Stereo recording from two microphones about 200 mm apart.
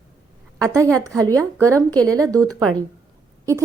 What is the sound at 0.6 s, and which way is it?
Speech, 15° right (ahead or behind).